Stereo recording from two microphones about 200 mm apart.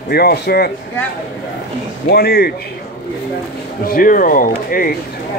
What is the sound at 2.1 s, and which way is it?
Speech, 50° left (ahead or behind).